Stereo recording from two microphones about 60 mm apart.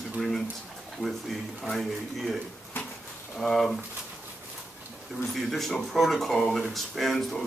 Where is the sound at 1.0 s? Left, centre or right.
Centre.